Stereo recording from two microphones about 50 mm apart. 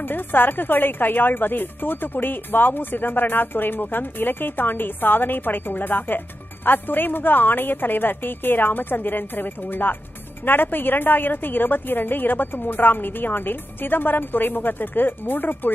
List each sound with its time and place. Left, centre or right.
0.0 s a woman's voice: left